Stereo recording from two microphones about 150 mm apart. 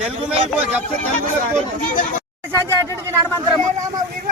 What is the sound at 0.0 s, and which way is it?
Speech, 10° right (ahead or behind).